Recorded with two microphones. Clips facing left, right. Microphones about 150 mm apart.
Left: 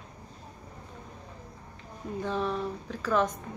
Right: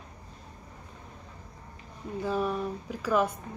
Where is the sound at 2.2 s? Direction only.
10° right (ahead or behind).